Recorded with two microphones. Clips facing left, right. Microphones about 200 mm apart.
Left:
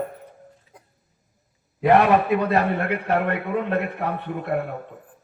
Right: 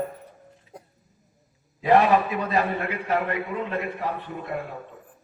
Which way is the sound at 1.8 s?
60° left (ahead or behind).